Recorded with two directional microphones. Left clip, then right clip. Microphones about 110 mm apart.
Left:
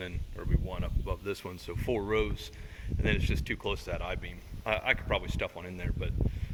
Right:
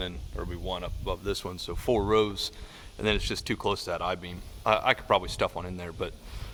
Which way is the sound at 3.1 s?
45° right (ahead or behind).